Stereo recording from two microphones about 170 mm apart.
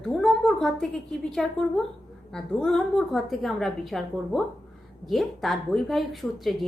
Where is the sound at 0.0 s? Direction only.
Centre (ahead or behind).